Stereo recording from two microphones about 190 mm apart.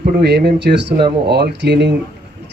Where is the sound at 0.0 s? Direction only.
60° right (ahead or behind).